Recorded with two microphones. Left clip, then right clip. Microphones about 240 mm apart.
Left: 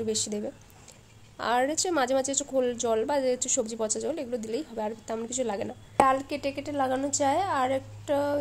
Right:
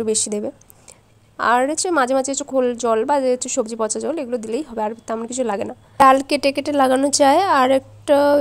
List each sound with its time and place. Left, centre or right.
0.0 s a woman's voice: right
6.0 s a woman's voice: right